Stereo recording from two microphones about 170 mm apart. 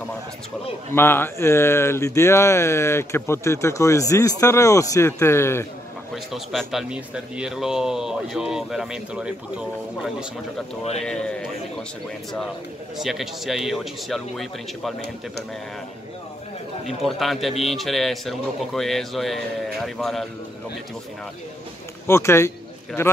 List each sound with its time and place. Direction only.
0.9 s speech: 15° left (ahead or behind)
6.1 s speech: centre (ahead or behind)
12.9 s speech: centre (ahead or behind)
16.8 s speech: centre (ahead or behind)
22.0 s speech: 15° left (ahead or behind)